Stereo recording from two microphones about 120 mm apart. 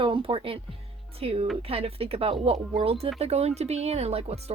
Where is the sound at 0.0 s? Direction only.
45° right (ahead or behind).